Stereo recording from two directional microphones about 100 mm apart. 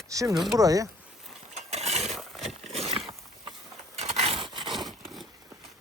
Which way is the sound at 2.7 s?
90° right.